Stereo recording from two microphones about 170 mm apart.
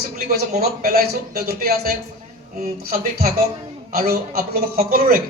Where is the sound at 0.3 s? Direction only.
60° right (ahead or behind).